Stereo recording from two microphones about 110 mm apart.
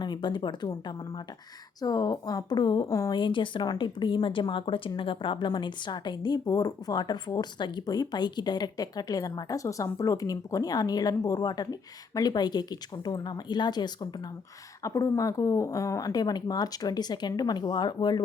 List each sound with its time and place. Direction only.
0.0 s speech: 45° left (ahead or behind)
14.8 s speech: 30° left (ahead or behind)